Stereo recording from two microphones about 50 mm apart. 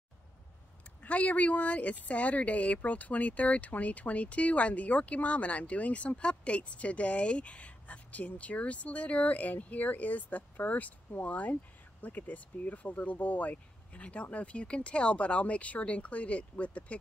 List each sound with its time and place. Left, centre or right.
1.0 s speech: left